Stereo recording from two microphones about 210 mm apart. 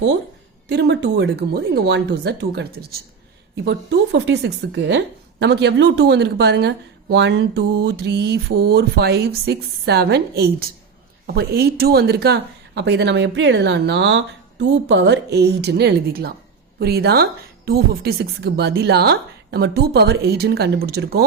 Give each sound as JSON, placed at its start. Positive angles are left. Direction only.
{"t": 0.7, "sound": "speech", "side_deg": -55}